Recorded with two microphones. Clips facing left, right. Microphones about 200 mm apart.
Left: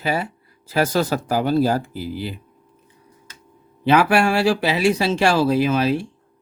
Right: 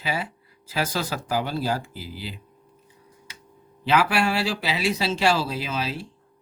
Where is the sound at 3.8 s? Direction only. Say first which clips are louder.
Left 6 dB; 50° left (ahead or behind).